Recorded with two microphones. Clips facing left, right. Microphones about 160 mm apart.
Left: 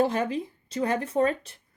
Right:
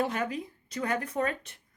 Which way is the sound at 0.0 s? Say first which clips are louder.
Left 5 dB; 30° left (ahead or behind).